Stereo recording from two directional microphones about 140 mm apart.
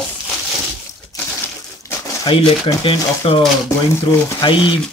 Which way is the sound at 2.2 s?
35° left (ahead or behind).